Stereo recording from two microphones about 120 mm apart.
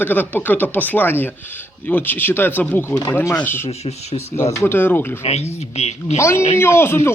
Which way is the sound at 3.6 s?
60° left (ahead or behind).